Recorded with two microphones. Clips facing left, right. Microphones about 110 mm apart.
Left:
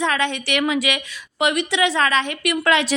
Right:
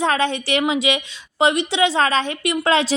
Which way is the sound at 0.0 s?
35° right (ahead or behind).